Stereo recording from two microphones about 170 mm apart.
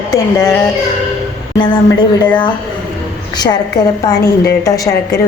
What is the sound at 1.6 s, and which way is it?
Speech, 25° left (ahead or behind).